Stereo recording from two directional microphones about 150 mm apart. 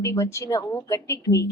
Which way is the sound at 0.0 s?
20° left (ahead or behind).